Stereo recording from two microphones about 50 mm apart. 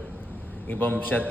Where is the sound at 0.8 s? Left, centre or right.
Left.